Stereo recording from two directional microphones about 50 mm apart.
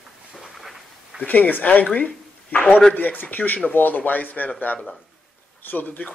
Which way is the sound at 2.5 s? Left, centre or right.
Left.